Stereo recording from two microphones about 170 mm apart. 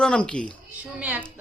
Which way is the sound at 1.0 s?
10° right (ahead or behind).